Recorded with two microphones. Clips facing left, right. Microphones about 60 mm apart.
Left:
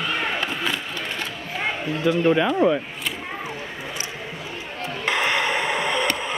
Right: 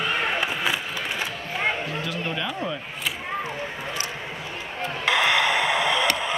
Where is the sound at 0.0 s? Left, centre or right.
Centre.